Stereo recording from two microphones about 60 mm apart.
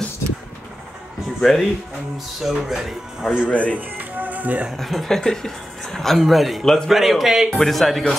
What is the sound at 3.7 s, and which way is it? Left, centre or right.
Music, right.